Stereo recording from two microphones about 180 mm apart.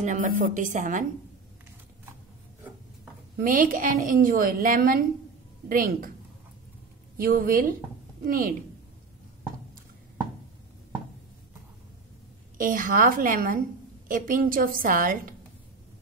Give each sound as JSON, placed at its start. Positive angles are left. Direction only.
{"t": 0.0, "sound": "a woman's voice", "side_deg": -45}
{"t": 3.3, "sound": "a woman's voice", "side_deg": -50}
{"t": 7.2, "sound": "a woman's voice", "side_deg": -50}
{"t": 12.5, "sound": "a woman's voice", "side_deg": -50}